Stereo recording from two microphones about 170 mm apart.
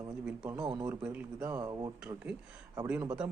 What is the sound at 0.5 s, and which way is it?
Speech, 25° right (ahead or behind).